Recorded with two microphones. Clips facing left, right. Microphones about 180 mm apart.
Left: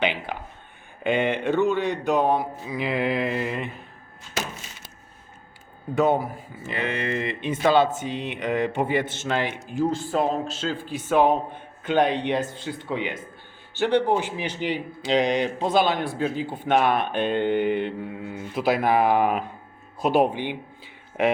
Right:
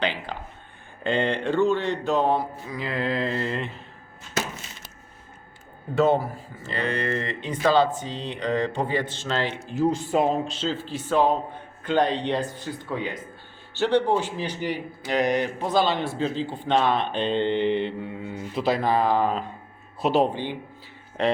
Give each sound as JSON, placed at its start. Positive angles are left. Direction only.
{"t": 0.0, "sound": "a sound", "side_deg": 20}
{"t": 1.0, "sound": "a man's voice", "side_deg": 20}
{"t": 5.9, "sound": "a man's voice", "side_deg": 15}
{"t": 9.8, "sound": "speech", "side_deg": 0}
{"t": 10.9, "sound": "a man's voice", "side_deg": 15}
{"t": 14.3, "sound": "a man's voice", "side_deg": 20}